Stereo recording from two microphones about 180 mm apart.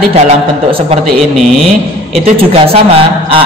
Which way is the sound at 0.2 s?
35° right (ahead or behind).